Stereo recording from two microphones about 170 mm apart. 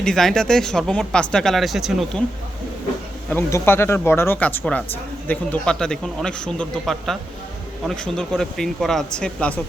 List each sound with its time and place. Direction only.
0.0 s speech: 5° left (ahead or behind)
3.2 s speech: 15° left (ahead or behind)